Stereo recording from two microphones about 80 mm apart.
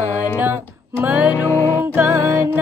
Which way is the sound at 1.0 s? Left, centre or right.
Centre.